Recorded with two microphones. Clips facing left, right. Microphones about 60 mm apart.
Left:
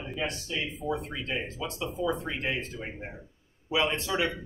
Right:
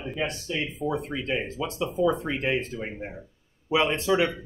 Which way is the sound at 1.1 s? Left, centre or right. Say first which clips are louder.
Right 5 dB; right.